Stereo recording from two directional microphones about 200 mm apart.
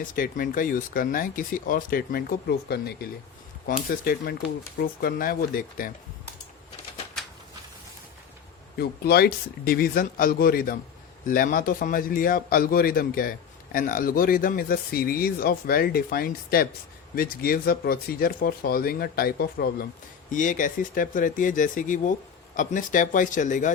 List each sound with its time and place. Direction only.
0.0 s speech: 45° left (ahead or behind)
8.8 s speech: 50° left (ahead or behind)